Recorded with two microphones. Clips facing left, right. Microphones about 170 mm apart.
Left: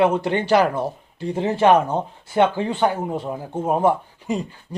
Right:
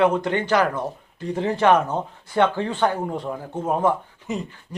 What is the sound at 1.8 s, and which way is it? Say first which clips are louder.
Speech: left 2 dB; 10° left (ahead or behind).